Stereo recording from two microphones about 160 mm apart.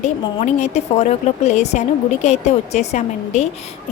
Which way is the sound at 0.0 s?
45° left (ahead or behind).